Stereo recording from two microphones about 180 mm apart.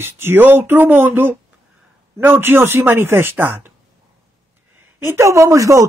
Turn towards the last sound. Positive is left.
turn(degrees=-15)  # may be behind; listen again after turning